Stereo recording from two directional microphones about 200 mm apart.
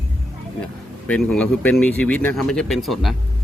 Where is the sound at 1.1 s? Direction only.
5° left (ahead or behind).